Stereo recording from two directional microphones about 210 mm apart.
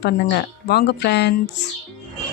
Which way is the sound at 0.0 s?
50° left (ahead or behind).